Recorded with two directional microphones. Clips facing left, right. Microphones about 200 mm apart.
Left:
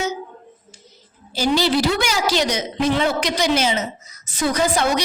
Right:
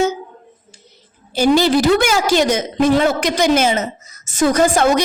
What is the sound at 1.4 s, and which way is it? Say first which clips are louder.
A woman's voice: right 5 dB; 50° right (ahead or behind).